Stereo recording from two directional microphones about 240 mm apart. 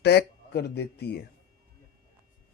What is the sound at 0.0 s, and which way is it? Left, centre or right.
Speech, left.